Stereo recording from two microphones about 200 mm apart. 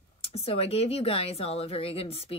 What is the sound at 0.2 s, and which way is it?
A woman's voice, 30° left (ahead or behind).